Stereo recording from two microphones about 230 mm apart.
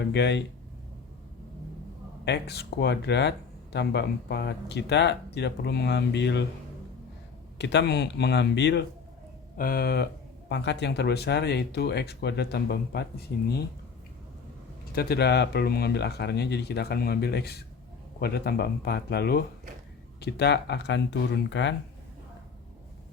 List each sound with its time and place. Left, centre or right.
0.1 s speech: left
2.2 s speech: left
7.6 s speech: left
14.9 s speech: left